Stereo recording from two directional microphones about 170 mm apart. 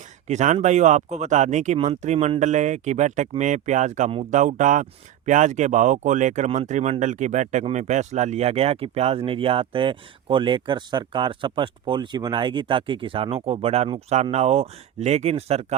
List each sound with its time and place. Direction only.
0.3 s speech: 45° right (ahead or behind)